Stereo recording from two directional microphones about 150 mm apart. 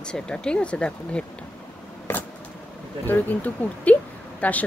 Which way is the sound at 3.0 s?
10° left (ahead or behind).